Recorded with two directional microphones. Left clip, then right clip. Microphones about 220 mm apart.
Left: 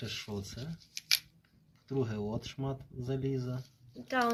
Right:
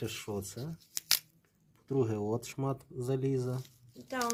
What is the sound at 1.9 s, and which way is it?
Speech, 60° right (ahead or behind).